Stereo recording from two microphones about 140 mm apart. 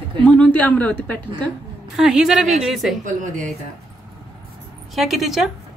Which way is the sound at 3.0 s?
65° right (ahead or behind).